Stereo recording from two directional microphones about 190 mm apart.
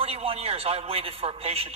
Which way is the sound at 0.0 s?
30° right (ahead or behind).